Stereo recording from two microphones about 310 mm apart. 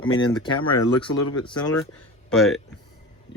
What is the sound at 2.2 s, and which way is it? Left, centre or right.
Speech, centre.